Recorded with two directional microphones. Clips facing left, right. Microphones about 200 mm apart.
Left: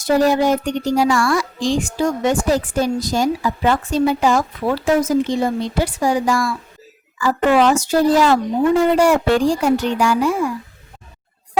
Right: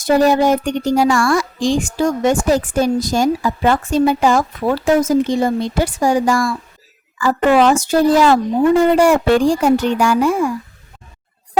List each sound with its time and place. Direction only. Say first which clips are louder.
0.0 s a child's voice: right 2 dB; 50° right (ahead or behind)